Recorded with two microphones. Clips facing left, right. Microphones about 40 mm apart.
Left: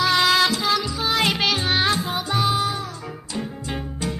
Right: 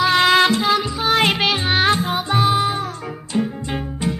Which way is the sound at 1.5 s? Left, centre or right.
Right.